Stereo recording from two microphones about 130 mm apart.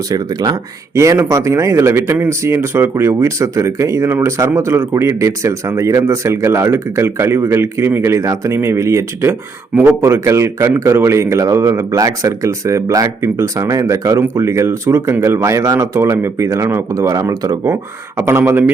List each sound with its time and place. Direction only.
0.1 s speech: 30° right (ahead or behind)